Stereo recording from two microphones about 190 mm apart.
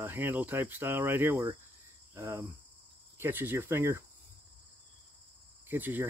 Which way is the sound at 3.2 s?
10° right (ahead or behind).